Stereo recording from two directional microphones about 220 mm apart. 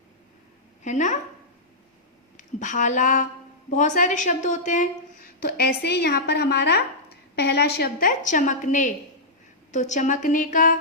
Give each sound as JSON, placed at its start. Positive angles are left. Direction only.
{"t": 0.9, "sound": "a woman's voice", "side_deg": 35}
{"t": 2.6, "sound": "a woman's voice", "side_deg": 35}